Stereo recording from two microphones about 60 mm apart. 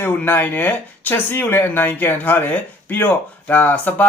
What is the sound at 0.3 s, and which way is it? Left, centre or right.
Speech, left.